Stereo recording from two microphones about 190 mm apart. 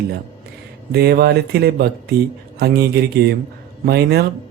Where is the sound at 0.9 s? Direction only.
55° right (ahead or behind).